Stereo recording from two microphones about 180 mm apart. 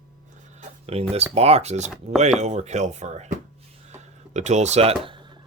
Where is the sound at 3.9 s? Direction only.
40° right (ahead or behind).